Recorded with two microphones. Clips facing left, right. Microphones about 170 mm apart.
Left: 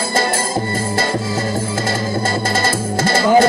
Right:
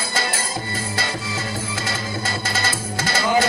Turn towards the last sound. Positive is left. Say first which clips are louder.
# left 7 dB
turn(degrees=50)  # may be behind; listen again after turning